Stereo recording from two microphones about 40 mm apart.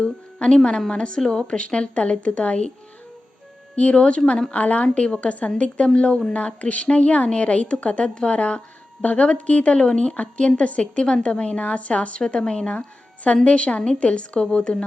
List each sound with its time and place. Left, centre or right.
0.0 s a woman's voice: left
3.8 s a woman's voice: left
6.3 s a woman's voice: left